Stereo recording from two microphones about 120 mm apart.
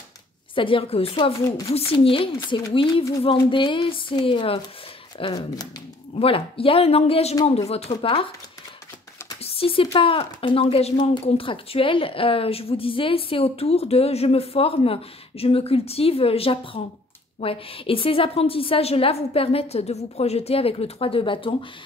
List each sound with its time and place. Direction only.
0.6 s a woman's voice: 45° left (ahead or behind)
9.4 s a woman's voice: 50° left (ahead or behind)
11.1 s a woman's voice: 45° left (ahead or behind)